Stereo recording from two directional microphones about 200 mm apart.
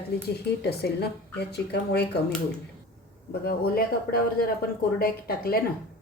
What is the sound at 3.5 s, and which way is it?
A woman's voice, 50° left (ahead or behind).